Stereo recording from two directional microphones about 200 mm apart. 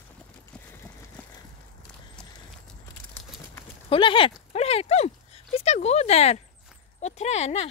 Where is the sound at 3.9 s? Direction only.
25° left (ahead or behind).